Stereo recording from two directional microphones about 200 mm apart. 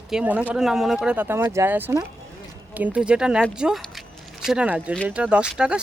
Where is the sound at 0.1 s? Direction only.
5° right (ahead or behind).